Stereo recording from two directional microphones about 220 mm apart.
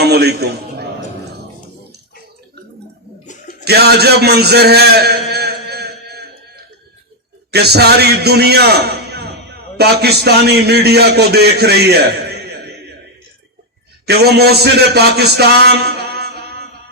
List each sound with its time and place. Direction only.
0.0 s a man's voice: 50° right (ahead or behind)
3.6 s a sound: 45° right (ahead or behind)
7.5 s a man's voice: 45° right (ahead or behind)
14.1 s a man's voice: 45° right (ahead or behind)